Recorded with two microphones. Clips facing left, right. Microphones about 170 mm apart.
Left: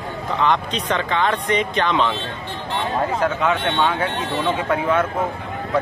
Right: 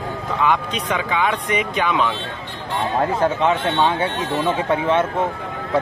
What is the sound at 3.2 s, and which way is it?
Speech, 25° right (ahead or behind).